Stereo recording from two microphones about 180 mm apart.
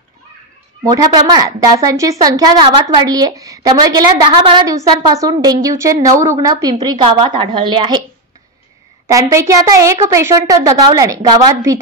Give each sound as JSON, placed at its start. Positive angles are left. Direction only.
{"t": 0.8, "sound": "a woman's voice", "side_deg": -20}
{"t": 9.0, "sound": "a woman's voice", "side_deg": -15}